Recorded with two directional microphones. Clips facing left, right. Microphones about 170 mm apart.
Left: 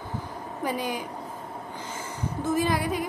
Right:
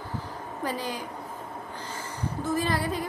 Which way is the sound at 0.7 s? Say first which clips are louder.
Left 3 dB; 15° left (ahead or behind).